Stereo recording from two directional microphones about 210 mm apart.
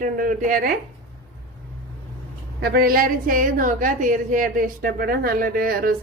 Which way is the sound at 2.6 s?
45° right (ahead or behind).